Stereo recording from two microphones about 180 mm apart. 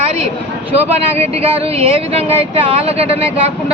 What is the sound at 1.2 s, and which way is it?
Speech, 35° right (ahead or behind).